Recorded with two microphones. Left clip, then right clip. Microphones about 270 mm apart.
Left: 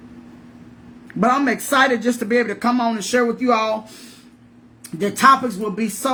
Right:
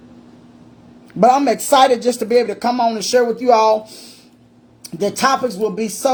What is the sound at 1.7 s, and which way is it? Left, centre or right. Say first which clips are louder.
Speech: right 5 dB; right.